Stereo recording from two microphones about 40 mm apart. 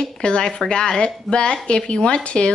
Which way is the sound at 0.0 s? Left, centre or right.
Left.